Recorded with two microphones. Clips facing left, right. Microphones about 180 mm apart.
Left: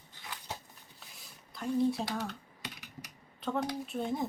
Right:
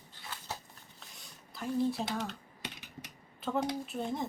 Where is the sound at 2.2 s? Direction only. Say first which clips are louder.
Even; 25° right (ahead or behind).